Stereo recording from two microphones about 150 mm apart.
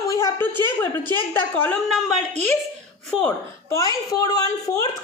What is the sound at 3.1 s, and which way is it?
Speech, 5° left (ahead or behind).